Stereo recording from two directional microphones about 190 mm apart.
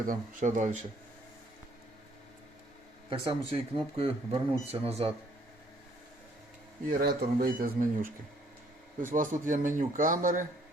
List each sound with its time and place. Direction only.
0.0 s speech: 45° right (ahead or behind)
3.1 s speech: 30° right (ahead or behind)
6.9 s speech: 55° right (ahead or behind)
9.1 s speech: 45° right (ahead or behind)